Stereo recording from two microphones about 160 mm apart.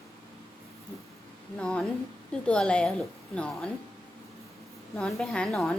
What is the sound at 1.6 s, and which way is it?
Speech, 5° left (ahead or behind).